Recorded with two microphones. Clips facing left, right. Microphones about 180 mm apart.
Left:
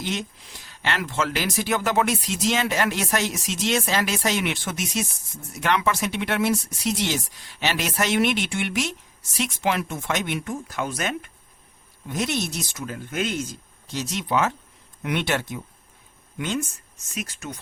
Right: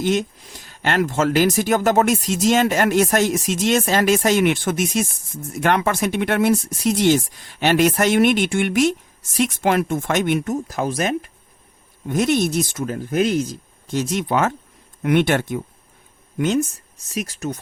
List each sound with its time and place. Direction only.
0.0 s speech: 50° right (ahead or behind)
12.0 s speech: 50° right (ahead or behind)
13.8 s speech: 50° right (ahead or behind); by 17.6 s 35° right (ahead or behind)